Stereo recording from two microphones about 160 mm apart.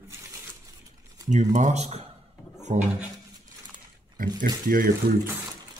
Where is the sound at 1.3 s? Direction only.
50° right (ahead or behind).